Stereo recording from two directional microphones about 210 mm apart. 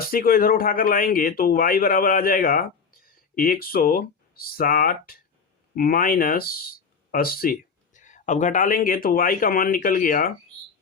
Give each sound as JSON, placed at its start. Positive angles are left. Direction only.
{"t": 0.1, "sound": "speech", "side_deg": 45}